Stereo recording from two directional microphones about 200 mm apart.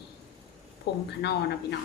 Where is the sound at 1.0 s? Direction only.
55° left (ahead or behind).